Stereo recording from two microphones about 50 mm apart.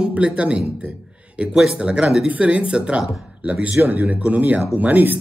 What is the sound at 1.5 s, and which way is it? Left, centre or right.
Speech, centre.